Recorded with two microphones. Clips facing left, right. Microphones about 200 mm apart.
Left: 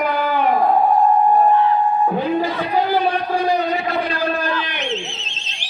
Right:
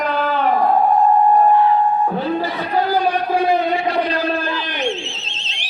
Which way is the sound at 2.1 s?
15° left (ahead or behind).